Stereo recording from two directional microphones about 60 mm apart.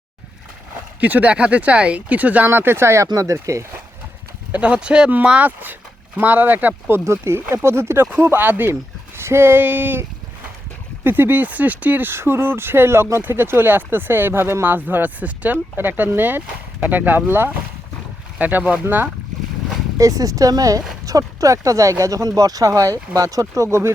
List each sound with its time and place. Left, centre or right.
1.0 s speech: right
2.5 s speech: right
4.5 s speech: right
5.5 s speech: right
7.0 s speech: right
9.1 s speech: right
11.0 s speech: right
18.3 s speech: right
20.0 s speech: right
21.1 s speech: right
23.6 s speech: right